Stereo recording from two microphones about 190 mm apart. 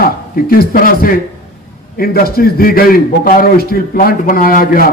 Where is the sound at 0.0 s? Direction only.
50° left (ahead or behind).